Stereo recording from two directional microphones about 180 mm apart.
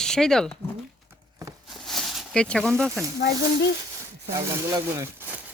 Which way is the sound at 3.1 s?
65° left (ahead or behind).